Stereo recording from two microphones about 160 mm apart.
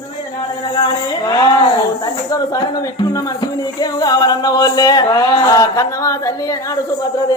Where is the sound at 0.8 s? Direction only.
30° left (ahead or behind).